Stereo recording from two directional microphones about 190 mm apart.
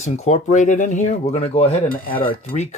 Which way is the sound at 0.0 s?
40° left (ahead or behind).